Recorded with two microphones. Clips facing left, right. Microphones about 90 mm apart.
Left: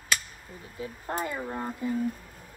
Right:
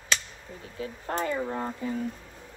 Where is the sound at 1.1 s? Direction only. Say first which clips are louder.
Right 3 dB; 10° left (ahead or behind).